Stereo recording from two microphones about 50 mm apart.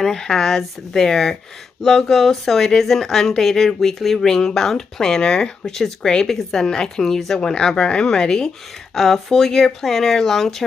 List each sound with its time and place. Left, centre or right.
0.0 s speech: centre
8.9 s speech: centre